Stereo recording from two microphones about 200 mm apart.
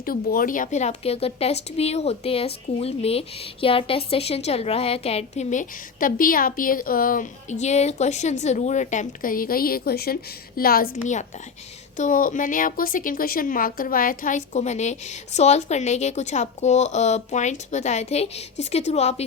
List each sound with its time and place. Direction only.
0.0 s a woman's voice: 45° left (ahead or behind)